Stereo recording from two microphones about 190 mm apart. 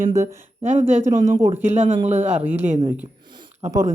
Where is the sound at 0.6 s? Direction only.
40° right (ahead or behind).